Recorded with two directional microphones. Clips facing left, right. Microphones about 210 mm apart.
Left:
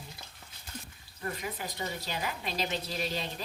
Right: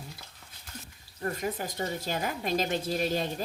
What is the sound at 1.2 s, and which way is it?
Speech, 45° right (ahead or behind).